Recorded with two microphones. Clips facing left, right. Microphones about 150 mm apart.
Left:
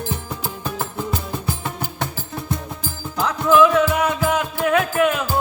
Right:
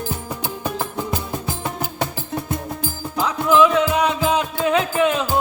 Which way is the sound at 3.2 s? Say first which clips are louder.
Left 1 dB; 15° right (ahead or behind).